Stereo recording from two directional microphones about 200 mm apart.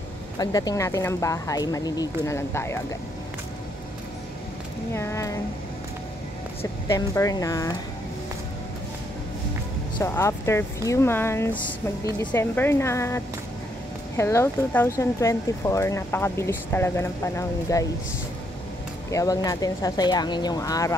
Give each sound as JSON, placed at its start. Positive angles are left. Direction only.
{"t": 0.4, "sound": "speech", "side_deg": 20}
{"t": 4.9, "sound": "speech", "side_deg": 15}
{"t": 6.6, "sound": "speech", "side_deg": 15}
{"t": 9.9, "sound": "speech", "side_deg": 15}
{"t": 19.0, "sound": "speech", "side_deg": 15}